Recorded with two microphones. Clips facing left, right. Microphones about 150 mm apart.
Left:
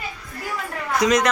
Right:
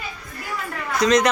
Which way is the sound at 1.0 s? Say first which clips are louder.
Right 1 dB; 10° left (ahead or behind).